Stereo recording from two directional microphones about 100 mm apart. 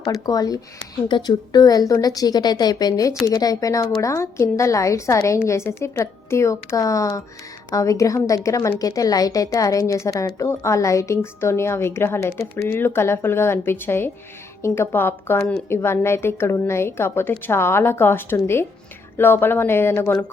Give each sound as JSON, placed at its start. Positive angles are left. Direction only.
{"t": 0.0, "sound": "speech", "side_deg": 40}
{"t": 1.0, "sound": "a woman's voice", "side_deg": 50}